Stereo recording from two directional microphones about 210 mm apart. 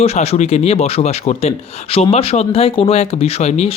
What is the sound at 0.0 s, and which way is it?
Speech, 30° left (ahead or behind).